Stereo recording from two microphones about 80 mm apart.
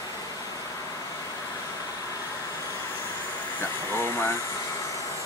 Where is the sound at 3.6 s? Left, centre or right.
Left.